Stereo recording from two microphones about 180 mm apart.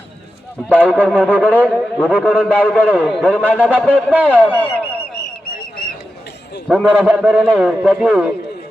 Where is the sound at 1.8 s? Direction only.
5° right (ahead or behind).